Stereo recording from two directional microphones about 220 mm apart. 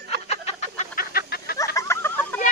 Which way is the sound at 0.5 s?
35° left (ahead or behind).